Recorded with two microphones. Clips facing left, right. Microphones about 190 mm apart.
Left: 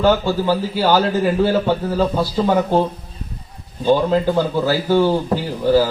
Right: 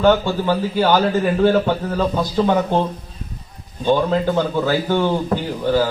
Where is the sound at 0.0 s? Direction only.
10° left (ahead or behind).